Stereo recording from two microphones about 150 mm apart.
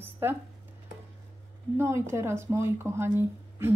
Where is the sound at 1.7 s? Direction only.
15° right (ahead or behind).